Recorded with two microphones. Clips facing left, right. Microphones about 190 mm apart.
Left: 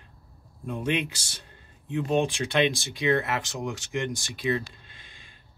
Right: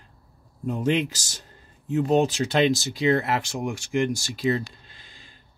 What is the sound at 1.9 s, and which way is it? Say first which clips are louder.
Speech: right 4 dB; 40° right (ahead or behind).